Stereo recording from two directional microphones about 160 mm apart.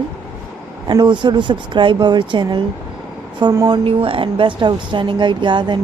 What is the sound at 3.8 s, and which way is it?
Speech, 35° right (ahead or behind).